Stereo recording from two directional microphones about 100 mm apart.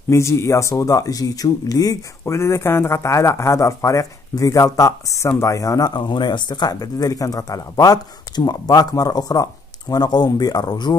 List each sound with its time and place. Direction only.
0.1 s speech: 30° left (ahead or behind); by 11.0 s 45° left (ahead or behind)